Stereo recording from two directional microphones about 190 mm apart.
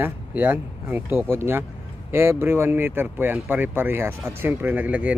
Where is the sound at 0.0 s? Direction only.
10° right (ahead or behind).